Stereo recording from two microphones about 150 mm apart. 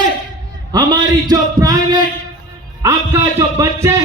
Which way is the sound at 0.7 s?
25° right (ahead or behind).